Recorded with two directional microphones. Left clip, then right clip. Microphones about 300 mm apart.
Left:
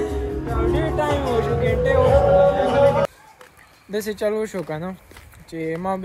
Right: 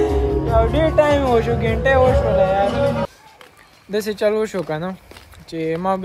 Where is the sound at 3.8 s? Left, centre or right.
Centre.